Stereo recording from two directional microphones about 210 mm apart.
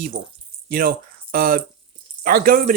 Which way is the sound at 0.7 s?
45° right (ahead or behind).